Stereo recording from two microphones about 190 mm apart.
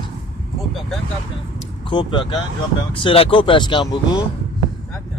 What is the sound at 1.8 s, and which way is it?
Speech, 25° left (ahead or behind).